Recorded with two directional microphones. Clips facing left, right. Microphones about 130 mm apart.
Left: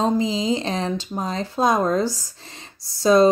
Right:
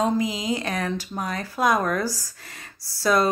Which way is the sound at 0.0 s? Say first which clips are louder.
Left 3 dB; 25° left (ahead or behind).